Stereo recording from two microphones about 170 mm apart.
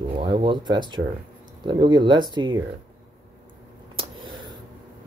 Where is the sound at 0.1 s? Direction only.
30° right (ahead or behind).